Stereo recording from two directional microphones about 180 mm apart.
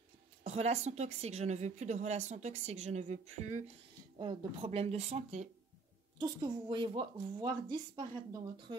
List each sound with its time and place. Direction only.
0.5 s a woman's voice: 35° right (ahead or behind)
4.2 s a woman's voice: 30° right (ahead or behind)
6.1 s a woman's voice: 25° right (ahead or behind)